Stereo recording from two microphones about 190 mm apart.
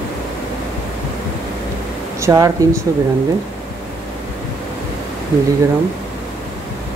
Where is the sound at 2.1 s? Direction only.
15° right (ahead or behind).